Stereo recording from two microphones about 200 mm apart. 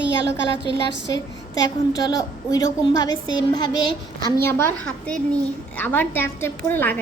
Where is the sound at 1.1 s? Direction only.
20° left (ahead or behind).